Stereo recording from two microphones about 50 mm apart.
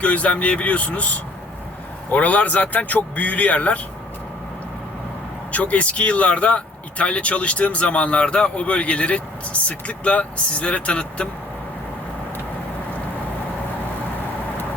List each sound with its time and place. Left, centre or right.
0.0 s speech: left
5.5 s speech: left